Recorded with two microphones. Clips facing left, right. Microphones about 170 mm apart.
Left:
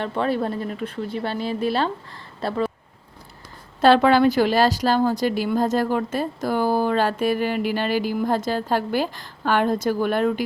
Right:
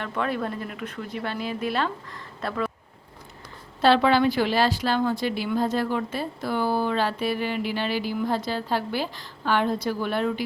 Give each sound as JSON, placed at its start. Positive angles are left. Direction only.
{"t": 0.0, "sound": "speech", "side_deg": 30}
{"t": 3.8, "sound": "a woman's voice", "side_deg": 45}